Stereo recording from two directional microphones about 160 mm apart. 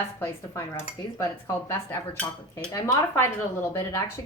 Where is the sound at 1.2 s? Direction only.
15° left (ahead or behind).